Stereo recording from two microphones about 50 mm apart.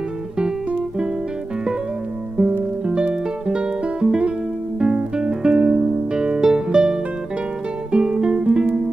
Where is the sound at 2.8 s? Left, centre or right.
Centre.